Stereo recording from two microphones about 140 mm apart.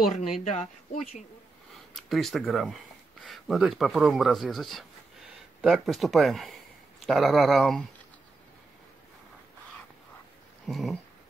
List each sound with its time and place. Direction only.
0.0 s speech: centre (ahead or behind)
0.4 s speech: 55° left (ahead or behind)
2.0 s speech: centre (ahead or behind)
10.7 s speech: centre (ahead or behind)